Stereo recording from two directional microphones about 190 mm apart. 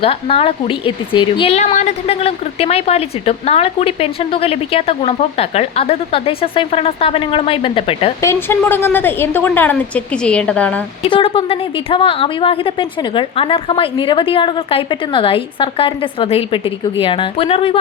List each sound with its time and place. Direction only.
0.0 s speech: 30° left (ahead or behind)
8.2 s a woman's voice: 15° left (ahead or behind)
11.0 s a woman's voice: 30° left (ahead or behind)